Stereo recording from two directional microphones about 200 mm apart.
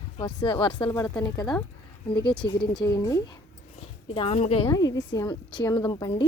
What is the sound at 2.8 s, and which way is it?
Speech, 15° left (ahead or behind).